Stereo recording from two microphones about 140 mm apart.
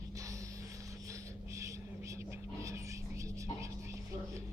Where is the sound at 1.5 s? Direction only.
20° right (ahead or behind).